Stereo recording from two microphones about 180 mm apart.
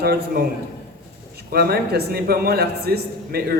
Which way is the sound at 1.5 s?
60° right (ahead or behind).